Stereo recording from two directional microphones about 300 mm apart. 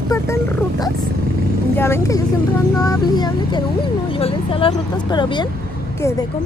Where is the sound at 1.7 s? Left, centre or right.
Centre.